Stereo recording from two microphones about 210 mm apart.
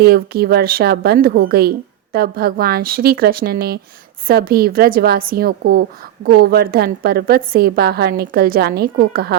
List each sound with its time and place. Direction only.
0.0 s a woman's voice: 45° right (ahead or behind)